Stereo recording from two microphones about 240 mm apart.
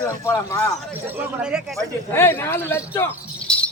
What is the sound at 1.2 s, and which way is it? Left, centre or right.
Speech, centre.